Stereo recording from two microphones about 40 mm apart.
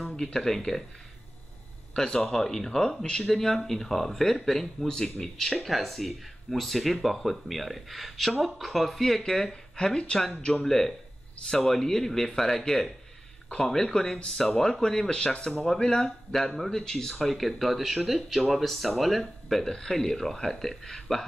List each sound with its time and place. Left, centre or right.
0.1 s speech: centre
2.1 s speech: centre
10.6 s speech: centre
15.6 s speech: centre
19.6 s speech: centre